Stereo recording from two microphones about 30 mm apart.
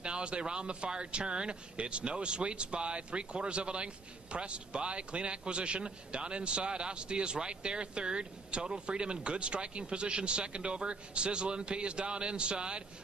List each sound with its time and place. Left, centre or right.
0.0 s speech: right